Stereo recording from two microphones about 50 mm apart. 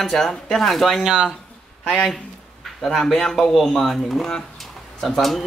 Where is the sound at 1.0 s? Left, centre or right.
Centre.